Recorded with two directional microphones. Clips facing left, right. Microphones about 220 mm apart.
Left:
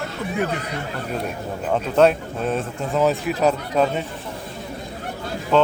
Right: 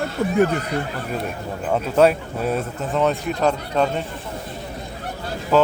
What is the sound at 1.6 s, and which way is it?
Speech, 5° right (ahead or behind).